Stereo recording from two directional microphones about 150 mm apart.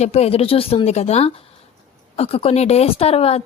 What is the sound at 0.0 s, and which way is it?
A woman's voice, 45° left (ahead or behind).